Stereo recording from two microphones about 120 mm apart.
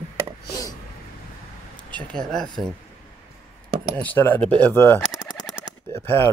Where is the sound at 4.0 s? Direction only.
15° left (ahead or behind).